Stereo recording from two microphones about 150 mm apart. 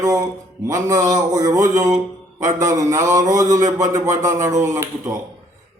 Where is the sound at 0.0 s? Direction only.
25° right (ahead or behind).